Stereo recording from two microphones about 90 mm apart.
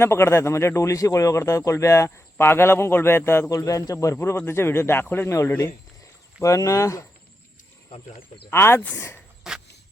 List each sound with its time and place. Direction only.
0.0 s a man's voice: 30° left (ahead or behind)
3.5 s a man's voice: 40° left (ahead or behind)
7.9 s speech: 90° left
8.4 s speech: 25° left (ahead or behind)
9.5 s a sound: 5° right (ahead or behind)